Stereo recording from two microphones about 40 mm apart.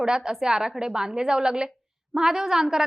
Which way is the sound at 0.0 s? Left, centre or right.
Centre.